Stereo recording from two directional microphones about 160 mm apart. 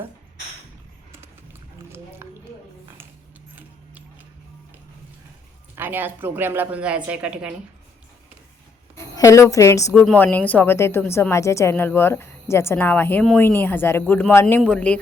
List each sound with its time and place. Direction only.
2.2 s a sound: 15° right (ahead or behind)
5.7 s a woman's voice: 10° right (ahead or behind)
9.1 s a woman's voice: 20° left (ahead or behind)